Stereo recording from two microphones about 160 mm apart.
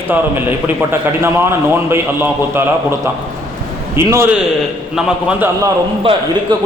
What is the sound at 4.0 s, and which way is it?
Speech, 15° right (ahead or behind).